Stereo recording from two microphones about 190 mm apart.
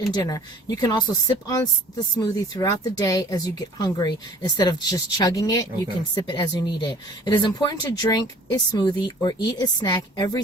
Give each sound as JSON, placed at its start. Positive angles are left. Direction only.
{"t": 0.1, "sound": "speech", "side_deg": 20}